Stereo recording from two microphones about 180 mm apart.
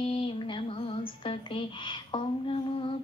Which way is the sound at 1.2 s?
30° left (ahead or behind).